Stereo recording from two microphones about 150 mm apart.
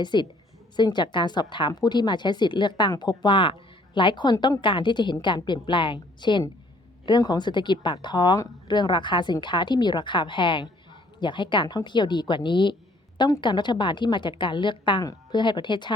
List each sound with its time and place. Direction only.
0.0 s speech: 30° left (ahead or behind)